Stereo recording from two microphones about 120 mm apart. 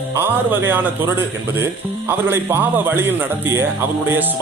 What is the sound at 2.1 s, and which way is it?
A man's voice, 20° right (ahead or behind).